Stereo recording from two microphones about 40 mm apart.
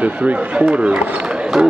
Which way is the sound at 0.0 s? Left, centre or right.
Right.